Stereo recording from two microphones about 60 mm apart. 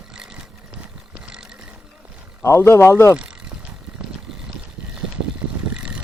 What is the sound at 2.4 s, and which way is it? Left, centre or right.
Speech, left.